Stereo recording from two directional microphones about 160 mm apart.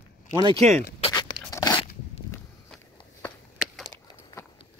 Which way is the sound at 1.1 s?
20° left (ahead or behind).